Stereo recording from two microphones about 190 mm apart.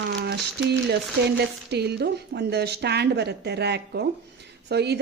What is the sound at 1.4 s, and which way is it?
Speech, 60° right (ahead or behind).